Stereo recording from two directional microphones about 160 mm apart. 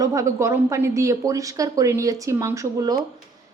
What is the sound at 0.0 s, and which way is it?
A woman's voice, 20° right (ahead or behind).